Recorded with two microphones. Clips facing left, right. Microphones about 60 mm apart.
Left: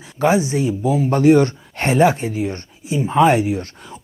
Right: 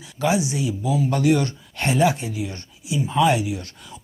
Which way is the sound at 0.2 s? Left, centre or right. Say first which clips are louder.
Left 5 dB; left.